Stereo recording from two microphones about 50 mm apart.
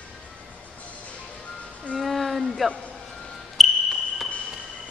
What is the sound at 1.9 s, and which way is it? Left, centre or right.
Music, centre.